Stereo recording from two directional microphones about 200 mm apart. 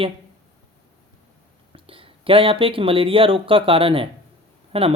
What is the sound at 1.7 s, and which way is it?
Speech, 25° right (ahead or behind).